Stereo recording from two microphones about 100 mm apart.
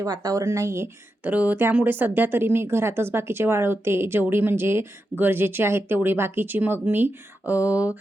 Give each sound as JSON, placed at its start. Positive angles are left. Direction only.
{"t": 0.0, "sound": "speech", "side_deg": -40}
{"t": 1.3, "sound": "speech", "side_deg": -15}